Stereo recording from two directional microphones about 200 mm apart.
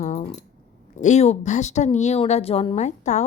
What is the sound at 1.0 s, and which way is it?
Speech, 35° left (ahead or behind).